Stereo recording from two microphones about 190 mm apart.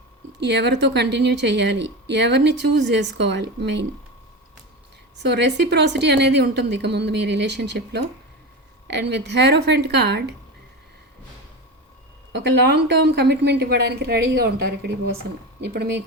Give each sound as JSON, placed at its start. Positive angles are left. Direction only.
{"t": 0.3, "sound": "speech", "side_deg": -65}
{"t": 5.2, "sound": "speech", "side_deg": -65}
{"t": 12.4, "sound": "speech", "side_deg": -60}